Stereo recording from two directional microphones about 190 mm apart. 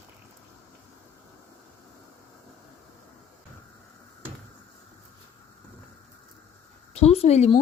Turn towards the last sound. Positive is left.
turn(degrees=35)  # may be behind; listen again after turning